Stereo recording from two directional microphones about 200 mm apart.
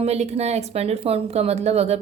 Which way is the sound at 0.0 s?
30° right (ahead or behind).